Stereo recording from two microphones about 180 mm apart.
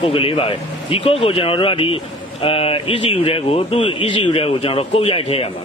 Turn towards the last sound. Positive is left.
turn(degrees=30)  # may be behind; listen again after turning